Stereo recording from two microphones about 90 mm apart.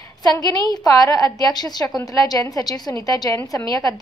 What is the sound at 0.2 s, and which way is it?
A woman's voice, 45° left (ahead or behind).